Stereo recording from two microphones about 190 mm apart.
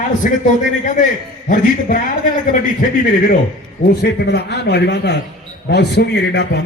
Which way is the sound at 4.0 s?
65° left (ahead or behind).